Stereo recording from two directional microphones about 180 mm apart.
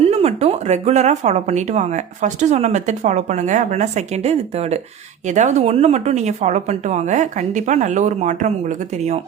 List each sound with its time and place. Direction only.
0.0 s speech: 35° right (ahead or behind)